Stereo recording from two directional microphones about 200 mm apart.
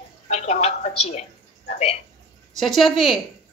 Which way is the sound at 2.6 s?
Centre (ahead or behind).